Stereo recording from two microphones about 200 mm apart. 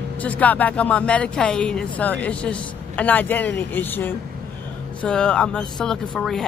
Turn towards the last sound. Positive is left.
turn(degrees=0)  # may be behind; listen again after turning